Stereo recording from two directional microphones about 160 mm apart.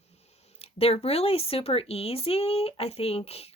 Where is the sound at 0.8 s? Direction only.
40° left (ahead or behind).